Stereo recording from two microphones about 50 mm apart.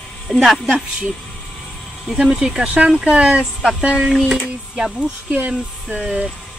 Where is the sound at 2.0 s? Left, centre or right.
Centre.